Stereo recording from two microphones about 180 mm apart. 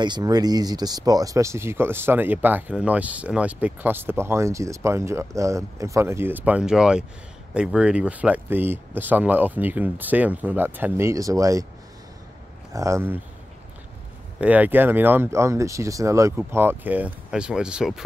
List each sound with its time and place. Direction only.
0.0 s speech: 25° right (ahead or behind)
12.7 s speech: 15° right (ahead or behind)
14.4 s speech: 10° right (ahead or behind)